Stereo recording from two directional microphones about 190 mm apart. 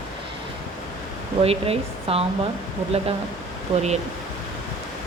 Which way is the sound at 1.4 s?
30° right (ahead or behind).